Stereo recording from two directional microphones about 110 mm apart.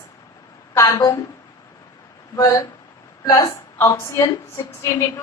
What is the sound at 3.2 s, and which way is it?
Speech, 40° left (ahead or behind).